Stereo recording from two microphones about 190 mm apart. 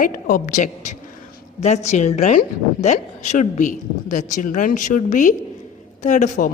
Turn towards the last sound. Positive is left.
turn(degrees=40)  # may be behind; listen again after turning